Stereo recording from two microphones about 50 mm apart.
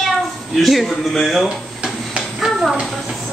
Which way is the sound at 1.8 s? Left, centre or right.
Centre.